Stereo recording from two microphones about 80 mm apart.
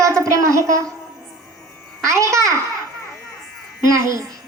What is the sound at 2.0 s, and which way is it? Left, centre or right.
Babbling, right.